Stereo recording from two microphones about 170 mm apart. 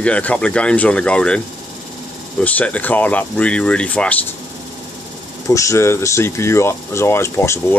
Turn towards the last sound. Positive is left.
turn(degrees=15)  # may be behind; listen again after turning